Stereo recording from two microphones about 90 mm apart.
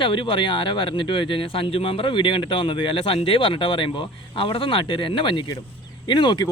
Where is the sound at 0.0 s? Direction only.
70° left (ahead or behind).